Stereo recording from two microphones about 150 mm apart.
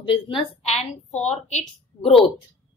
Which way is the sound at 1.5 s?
40° left (ahead or behind).